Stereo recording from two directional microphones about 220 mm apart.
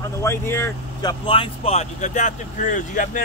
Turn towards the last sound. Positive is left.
turn(degrees=35)  # may be behind; listen again after turning